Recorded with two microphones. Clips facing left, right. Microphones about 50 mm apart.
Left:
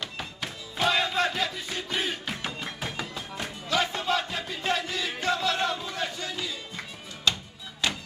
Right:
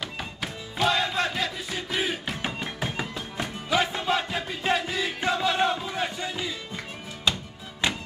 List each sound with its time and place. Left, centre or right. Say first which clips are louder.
0.0 s music: right 2 dB; centre
2.4 s music: right 3 dB; centre